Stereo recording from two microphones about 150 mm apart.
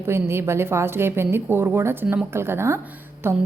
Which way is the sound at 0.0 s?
15° right (ahead or behind).